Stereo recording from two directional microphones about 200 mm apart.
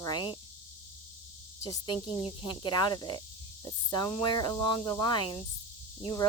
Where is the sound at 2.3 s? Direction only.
20° left (ahead or behind).